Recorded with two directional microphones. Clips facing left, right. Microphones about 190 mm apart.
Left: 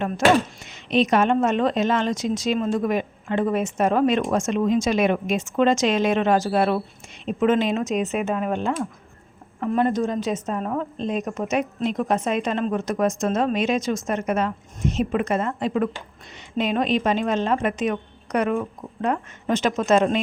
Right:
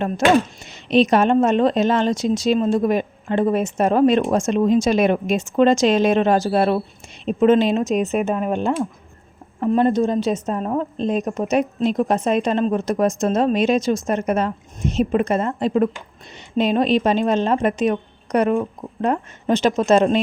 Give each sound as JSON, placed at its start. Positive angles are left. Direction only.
{"t": 0.6, "sound": "speech", "side_deg": -35}